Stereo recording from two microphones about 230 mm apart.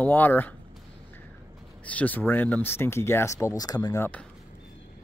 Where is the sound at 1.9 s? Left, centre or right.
Centre.